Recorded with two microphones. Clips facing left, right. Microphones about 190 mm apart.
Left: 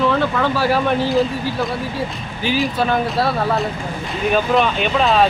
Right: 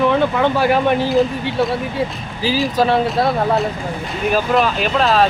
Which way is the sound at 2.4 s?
35° right (ahead or behind).